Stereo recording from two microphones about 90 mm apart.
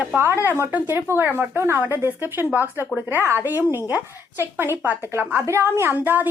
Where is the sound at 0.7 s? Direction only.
25° right (ahead or behind).